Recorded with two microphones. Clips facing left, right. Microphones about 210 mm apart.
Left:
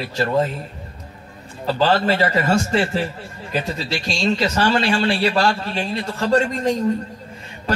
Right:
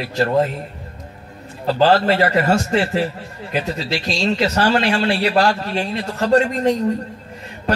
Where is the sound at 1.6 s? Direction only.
40° right (ahead or behind).